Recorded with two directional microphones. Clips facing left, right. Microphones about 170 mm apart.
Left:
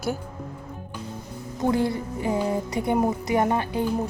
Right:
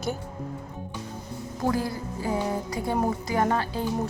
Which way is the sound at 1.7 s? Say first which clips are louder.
Left 4 dB; 25° left (ahead or behind).